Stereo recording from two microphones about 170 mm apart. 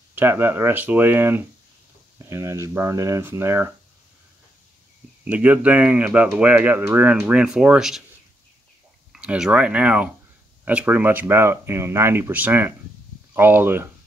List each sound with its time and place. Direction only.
0.1 s speech: 10° right (ahead or behind)
5.2 s speech: 10° right (ahead or behind)
9.1 s speech: 5° right (ahead or behind)